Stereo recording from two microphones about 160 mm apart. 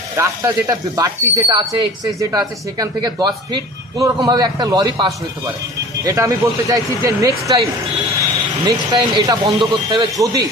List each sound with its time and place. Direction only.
0.1 s speech: 20° right (ahead or behind)
8.6 s speech: 25° right (ahead or behind)